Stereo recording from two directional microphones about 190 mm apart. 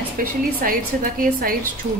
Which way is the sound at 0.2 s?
50° right (ahead or behind).